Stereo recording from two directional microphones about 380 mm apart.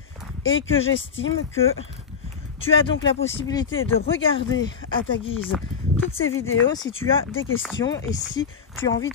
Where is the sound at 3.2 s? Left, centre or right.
Centre.